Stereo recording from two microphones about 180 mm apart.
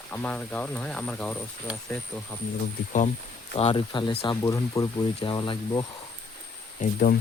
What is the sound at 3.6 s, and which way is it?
Speech, 30° left (ahead or behind).